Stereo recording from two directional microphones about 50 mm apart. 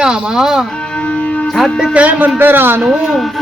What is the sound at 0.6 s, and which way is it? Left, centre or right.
Music, centre.